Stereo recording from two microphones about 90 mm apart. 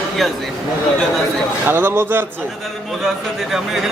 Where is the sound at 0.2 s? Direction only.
Centre (ahead or behind).